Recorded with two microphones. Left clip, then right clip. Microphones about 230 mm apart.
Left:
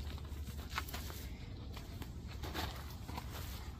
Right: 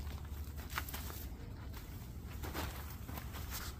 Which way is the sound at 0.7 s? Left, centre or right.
Centre.